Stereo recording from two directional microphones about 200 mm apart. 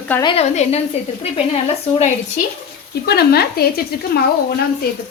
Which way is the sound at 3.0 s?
55° left (ahead or behind).